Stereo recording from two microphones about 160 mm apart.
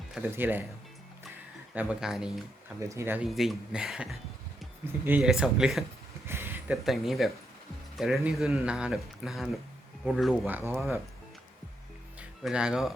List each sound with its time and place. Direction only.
0.2 s speech: 15° right (ahead or behind)
1.7 s speech: 10° right (ahead or behind)
2.9 s speech: 15° right (ahead or behind)
3.2 s speech: centre (ahead or behind)
6.2 s a sound: 15° right (ahead or behind)
6.8 s speech: centre (ahead or behind)
10.4 s speech: 10° right (ahead or behind)
12.4 s speech: 5° right (ahead or behind)